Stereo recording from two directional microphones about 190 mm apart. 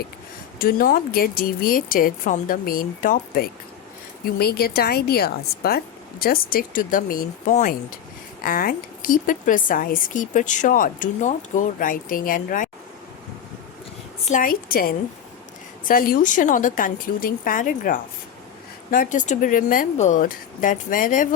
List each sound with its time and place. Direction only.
0.6 s speech: 50° left (ahead or behind)
14.3 s speech: 45° left (ahead or behind)
19.1 s speech: 40° left (ahead or behind)